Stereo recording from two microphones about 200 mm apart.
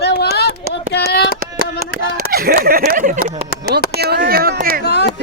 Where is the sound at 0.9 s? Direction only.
55° left (ahead or behind).